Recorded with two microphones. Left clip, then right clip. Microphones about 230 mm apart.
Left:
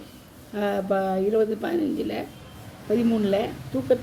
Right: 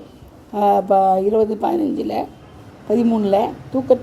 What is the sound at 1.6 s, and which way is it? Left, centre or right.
Speech, centre.